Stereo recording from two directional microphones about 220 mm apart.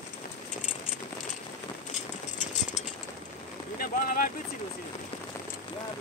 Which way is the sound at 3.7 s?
40° left (ahead or behind).